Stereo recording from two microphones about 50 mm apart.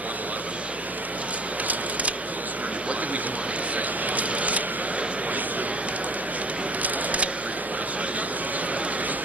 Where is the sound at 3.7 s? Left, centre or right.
Right.